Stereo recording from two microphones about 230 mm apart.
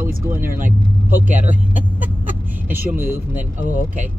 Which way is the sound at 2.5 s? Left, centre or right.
Centre.